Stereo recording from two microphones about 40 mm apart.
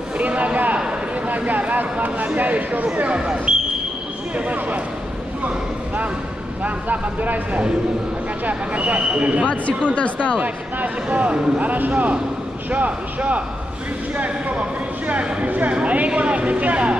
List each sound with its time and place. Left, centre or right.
0.2 s a sound: right
1.2 s speech: right
3.2 s speech: right
4.4 s speech: right
6.6 s speech: right
9.9 s speech: left
10.4 s speech: right